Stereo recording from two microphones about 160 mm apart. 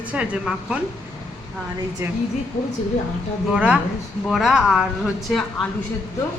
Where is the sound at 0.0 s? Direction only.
5° right (ahead or behind).